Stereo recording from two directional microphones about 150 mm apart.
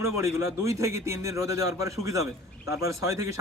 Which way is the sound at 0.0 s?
20° right (ahead or behind).